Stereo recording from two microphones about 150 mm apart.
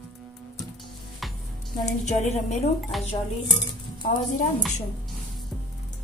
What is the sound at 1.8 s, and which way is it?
Speech, 50° left (ahead or behind).